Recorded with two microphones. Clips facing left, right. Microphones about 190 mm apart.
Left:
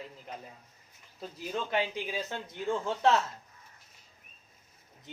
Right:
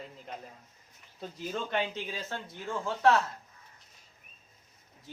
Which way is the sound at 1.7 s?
10° left (ahead or behind).